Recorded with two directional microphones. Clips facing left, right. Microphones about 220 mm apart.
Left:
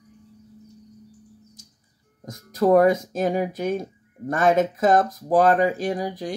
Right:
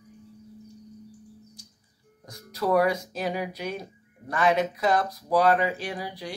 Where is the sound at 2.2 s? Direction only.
45° left (ahead or behind).